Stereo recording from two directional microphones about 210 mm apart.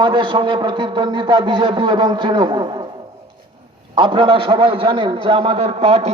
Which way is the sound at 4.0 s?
25° right (ahead or behind).